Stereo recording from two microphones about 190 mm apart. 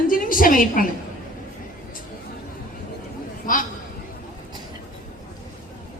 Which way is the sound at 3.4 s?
45° left (ahead or behind).